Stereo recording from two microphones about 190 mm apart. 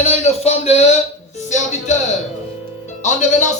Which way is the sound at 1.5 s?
40° left (ahead or behind).